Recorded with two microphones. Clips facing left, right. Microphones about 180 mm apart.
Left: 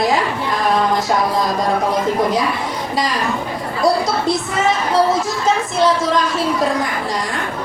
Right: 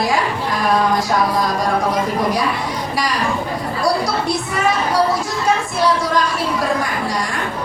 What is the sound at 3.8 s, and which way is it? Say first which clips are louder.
Speech: left 3 dB; 20° left (ahead or behind).